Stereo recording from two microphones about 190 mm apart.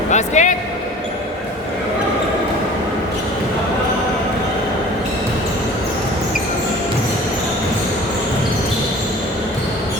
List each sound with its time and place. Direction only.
0.1 s speech: 40° left (ahead or behind)